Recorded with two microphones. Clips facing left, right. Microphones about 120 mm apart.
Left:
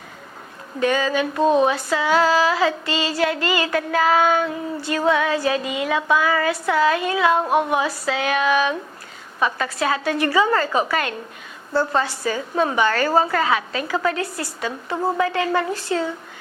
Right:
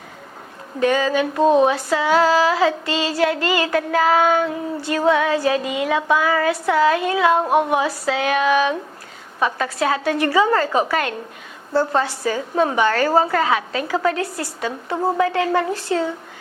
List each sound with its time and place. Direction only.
0.8 s female singing: 45° right (ahead or behind)
14.9 s speech: 25° right (ahead or behind)
15.2 s female singing: 45° right (ahead or behind)